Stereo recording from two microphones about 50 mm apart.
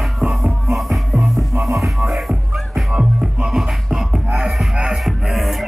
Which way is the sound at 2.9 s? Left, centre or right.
Centre.